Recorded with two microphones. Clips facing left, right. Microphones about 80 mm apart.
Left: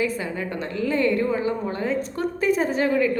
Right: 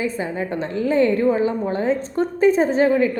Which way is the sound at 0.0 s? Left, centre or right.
Right.